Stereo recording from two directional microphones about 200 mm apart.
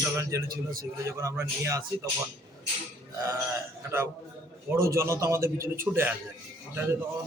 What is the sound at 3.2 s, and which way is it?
A man's voice, 15° right (ahead or behind).